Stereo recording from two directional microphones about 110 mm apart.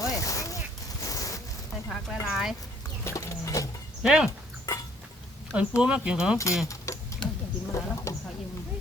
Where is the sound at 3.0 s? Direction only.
25° left (ahead or behind).